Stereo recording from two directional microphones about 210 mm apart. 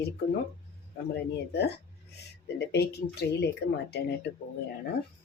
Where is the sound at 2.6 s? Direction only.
50° left (ahead or behind).